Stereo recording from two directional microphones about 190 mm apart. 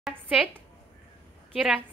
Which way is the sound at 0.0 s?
Centre (ahead or behind).